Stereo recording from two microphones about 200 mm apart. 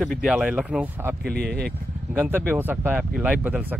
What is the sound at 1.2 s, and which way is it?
Speech, 50° right (ahead or behind).